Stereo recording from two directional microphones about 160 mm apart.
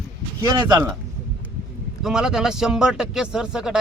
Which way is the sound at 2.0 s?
5° right (ahead or behind).